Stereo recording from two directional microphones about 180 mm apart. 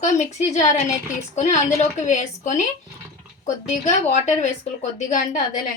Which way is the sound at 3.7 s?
40° left (ahead or behind).